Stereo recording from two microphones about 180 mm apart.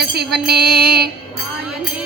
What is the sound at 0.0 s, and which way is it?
Music, 65° right (ahead or behind).